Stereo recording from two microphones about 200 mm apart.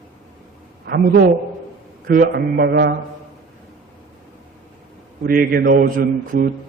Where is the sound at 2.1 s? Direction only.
45° right (ahead or behind).